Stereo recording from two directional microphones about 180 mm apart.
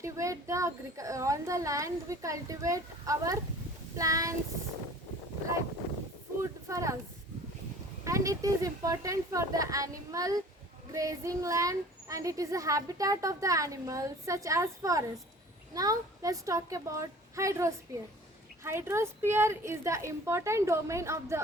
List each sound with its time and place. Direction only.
0.0 s a child's voice: 15° right (ahead or behind)
6.4 s speech: 15° right (ahead or behind)
8.0 s a woman's voice: 15° right (ahead or behind)